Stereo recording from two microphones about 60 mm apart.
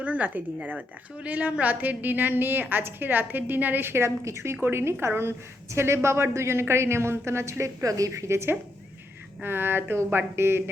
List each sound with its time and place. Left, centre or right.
0.0 s a woman's voice: right
8.3 s a woman's voice: right